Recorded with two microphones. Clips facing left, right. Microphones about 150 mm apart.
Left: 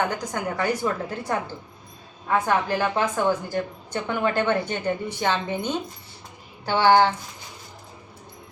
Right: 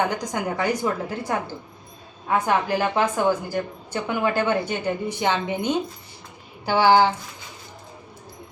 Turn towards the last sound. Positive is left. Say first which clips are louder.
# right 1 dB
turn(degrees=-10)  # may be behind; listen again after turning